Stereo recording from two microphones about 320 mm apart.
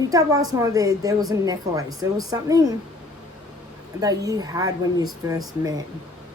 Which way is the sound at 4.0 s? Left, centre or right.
Centre.